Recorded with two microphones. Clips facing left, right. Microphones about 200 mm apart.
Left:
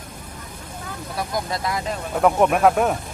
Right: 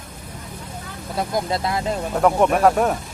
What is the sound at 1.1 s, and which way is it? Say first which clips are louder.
Speech: right 4 dB; 25° right (ahead or behind).